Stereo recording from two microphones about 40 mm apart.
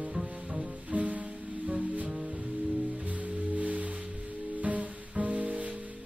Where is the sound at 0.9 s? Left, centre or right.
Right.